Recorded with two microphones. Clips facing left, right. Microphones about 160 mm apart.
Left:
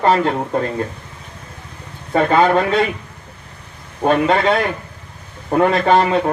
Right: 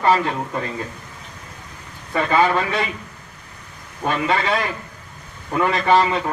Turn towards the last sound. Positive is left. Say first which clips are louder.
# left 3 dB
turn(degrees=55)  # may be behind; listen again after turning